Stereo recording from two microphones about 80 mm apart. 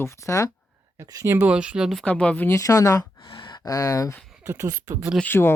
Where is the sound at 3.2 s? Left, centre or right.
Left.